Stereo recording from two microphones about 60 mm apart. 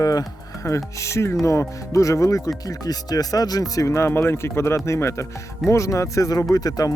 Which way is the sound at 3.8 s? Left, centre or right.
Left.